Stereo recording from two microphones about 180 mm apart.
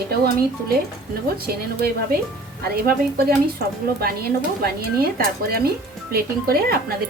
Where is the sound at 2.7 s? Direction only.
55° right (ahead or behind).